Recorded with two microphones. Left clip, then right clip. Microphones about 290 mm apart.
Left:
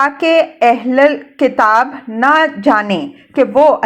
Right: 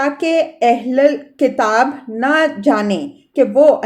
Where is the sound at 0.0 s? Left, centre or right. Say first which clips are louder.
Left 4 dB; centre.